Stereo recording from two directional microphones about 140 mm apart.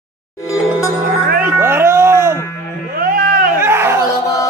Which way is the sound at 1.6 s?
15° right (ahead or behind).